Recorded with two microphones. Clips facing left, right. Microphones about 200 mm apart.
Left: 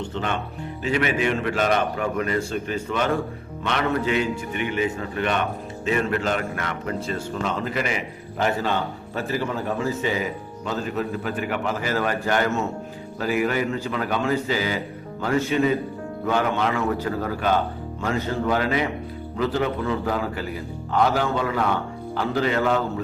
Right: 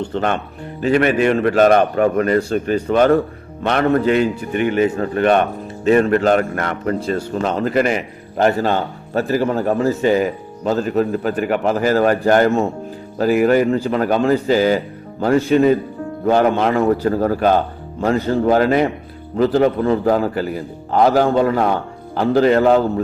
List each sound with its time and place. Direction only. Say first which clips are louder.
0.1 s a man's voice: right 8 dB; 45° right (ahead or behind)
13.3 s a man's voice: right 9 dB; 45° right (ahead or behind)